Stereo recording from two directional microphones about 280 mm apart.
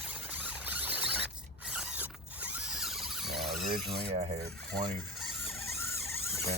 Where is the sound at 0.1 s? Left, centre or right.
Centre.